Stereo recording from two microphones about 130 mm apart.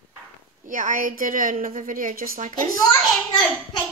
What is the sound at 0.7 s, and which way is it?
A woman's voice, 85° right.